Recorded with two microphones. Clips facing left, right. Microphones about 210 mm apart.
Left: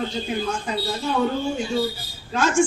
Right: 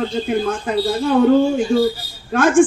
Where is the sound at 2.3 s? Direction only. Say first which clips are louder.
Right 7 dB; 55° right (ahead or behind).